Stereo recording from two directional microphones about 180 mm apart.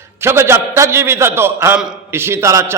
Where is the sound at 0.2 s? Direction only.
15° right (ahead or behind).